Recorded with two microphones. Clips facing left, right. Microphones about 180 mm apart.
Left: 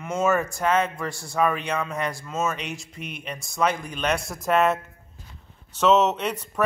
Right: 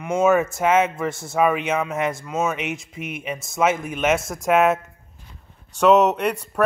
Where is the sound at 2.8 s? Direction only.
5° right (ahead or behind).